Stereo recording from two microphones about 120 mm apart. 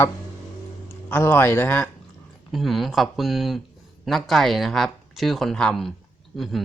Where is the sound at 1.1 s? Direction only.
20° left (ahead or behind).